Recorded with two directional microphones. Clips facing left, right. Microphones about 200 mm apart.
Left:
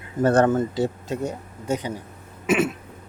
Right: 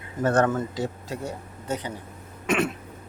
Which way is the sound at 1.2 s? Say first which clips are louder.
Left 3 dB; 15° left (ahead or behind).